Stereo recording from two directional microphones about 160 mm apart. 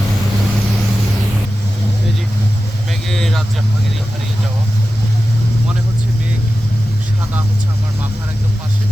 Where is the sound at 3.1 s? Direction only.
5° left (ahead or behind).